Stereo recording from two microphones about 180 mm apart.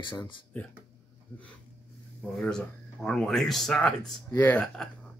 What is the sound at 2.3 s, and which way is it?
Speech, centre (ahead or behind).